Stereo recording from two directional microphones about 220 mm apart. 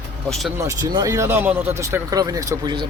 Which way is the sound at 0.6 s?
15° right (ahead or behind).